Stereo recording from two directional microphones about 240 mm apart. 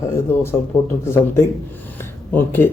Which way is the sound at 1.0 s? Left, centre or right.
Centre.